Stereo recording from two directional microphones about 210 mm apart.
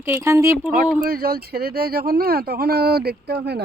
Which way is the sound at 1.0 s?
45° right (ahead or behind).